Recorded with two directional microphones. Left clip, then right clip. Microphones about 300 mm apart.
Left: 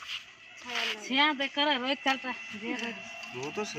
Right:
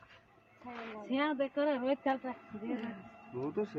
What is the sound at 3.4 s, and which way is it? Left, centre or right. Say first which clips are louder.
Speech: left 1 dB; centre.